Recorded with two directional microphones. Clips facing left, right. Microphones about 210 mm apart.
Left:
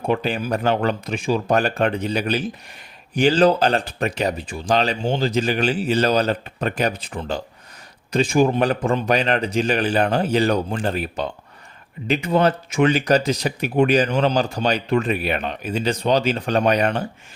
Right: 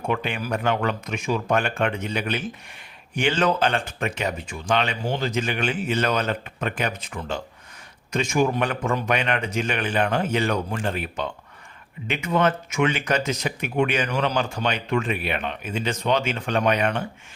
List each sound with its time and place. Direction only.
0.0 s speech: 35° left (ahead or behind)